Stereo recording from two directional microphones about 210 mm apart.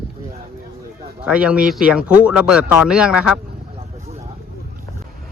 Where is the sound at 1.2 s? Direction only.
5° right (ahead or behind).